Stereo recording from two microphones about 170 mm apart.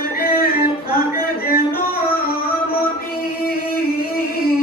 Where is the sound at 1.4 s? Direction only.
60° left (ahead or behind).